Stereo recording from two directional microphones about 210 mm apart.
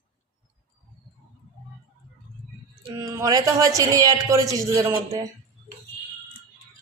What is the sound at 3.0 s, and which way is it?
A woman's voice, 15° right (ahead or behind).